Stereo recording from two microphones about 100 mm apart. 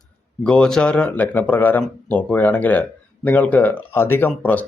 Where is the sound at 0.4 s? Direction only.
10° left (ahead or behind).